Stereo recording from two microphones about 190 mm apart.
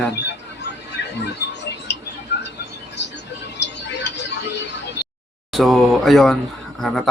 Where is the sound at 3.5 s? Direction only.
65° left (ahead or behind).